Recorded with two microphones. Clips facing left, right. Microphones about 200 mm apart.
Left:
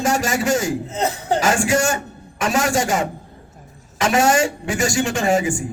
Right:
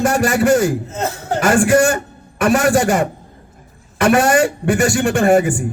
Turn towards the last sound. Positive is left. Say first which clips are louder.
# right 6 dB
turn(degrees=-60)  # may be behind; listen again after turning